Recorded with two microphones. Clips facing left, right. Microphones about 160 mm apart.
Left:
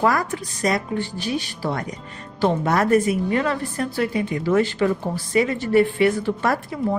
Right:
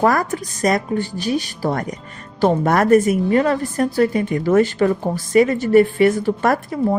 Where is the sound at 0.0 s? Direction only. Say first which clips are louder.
Right 3 dB; 45° right (ahead or behind).